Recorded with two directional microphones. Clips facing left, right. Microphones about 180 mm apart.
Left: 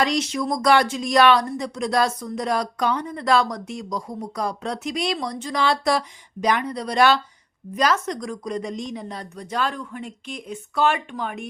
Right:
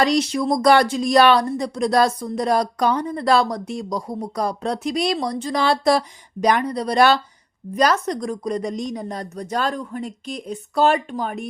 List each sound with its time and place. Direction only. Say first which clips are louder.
0.0 s speech: right 4 dB; 35° right (ahead or behind)